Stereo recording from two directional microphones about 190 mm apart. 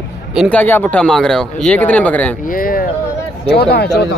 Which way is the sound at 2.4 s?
45° left (ahead or behind).